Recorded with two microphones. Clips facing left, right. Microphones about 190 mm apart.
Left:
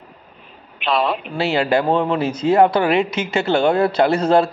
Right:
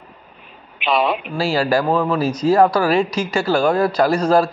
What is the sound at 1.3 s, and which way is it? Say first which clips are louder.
Speech: left 1 dB; 20° left (ahead or behind).